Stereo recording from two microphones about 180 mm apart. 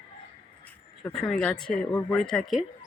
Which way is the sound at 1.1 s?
Centre (ahead or behind).